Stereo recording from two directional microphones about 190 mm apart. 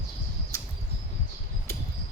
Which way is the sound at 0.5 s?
15° left (ahead or behind).